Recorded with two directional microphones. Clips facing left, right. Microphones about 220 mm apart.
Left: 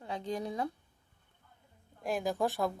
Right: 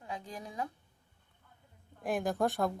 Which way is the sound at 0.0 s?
35° left (ahead or behind).